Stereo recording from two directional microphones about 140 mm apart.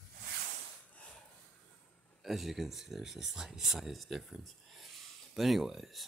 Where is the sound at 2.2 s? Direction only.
Centre (ahead or behind).